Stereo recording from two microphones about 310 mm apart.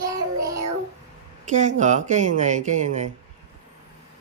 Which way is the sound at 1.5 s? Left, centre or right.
Right.